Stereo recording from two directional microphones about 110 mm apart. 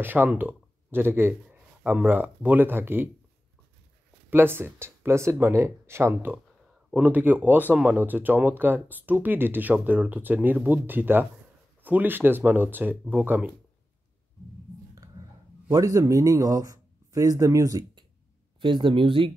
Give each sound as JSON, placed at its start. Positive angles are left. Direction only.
{"t": 0.0, "sound": "speech", "side_deg": -15}
{"t": 4.3, "sound": "speech", "side_deg": -20}
{"t": 15.2, "sound": "a sound", "side_deg": -45}
{"t": 15.7, "sound": "speech", "side_deg": -30}
{"t": 18.6, "sound": "speech", "side_deg": -50}